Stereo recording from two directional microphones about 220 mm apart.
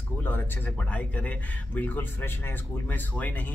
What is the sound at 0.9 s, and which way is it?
A man's voice, 5° left (ahead or behind).